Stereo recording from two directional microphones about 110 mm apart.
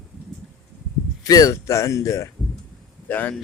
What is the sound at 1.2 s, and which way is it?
Speech, 35° left (ahead or behind).